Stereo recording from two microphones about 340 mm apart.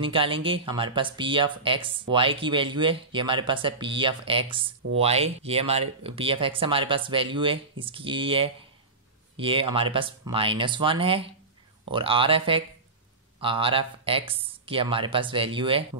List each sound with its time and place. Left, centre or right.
0.0 s speech: centre